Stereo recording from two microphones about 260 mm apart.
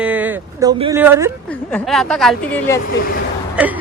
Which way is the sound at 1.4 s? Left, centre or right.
Centre.